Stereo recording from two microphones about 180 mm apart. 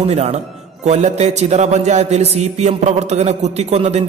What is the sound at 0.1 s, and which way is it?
A man's voice, 35° right (ahead or behind).